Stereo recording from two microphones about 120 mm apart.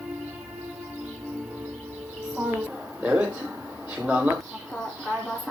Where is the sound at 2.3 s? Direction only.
10° right (ahead or behind).